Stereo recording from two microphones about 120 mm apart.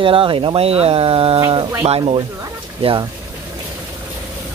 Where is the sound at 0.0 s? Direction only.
45° right (ahead or behind).